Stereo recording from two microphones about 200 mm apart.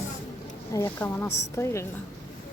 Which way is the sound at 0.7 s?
10° left (ahead or behind).